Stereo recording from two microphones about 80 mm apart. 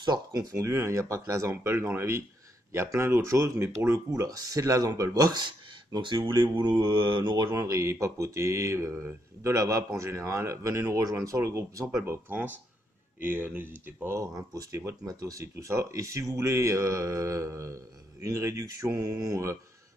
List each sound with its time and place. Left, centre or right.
0.0 s speech: right
0.4 s speech: right
7.6 s speech: right
12.0 s speech: right
14.5 s speech: right